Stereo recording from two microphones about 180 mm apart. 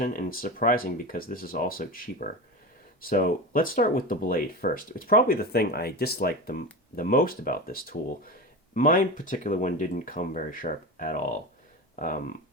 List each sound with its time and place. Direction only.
0.0 s speech: 50° left (ahead or behind)